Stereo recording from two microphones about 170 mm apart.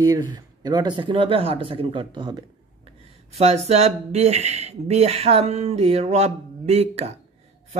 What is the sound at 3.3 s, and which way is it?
Speech, 40° right (ahead or behind).